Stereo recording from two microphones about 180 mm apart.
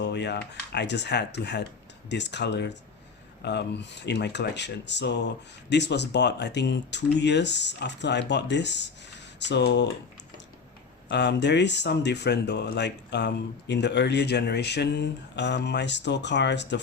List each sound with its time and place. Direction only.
0.0 s speech: 70° left (ahead or behind)
11.1 s speech: 70° left (ahead or behind)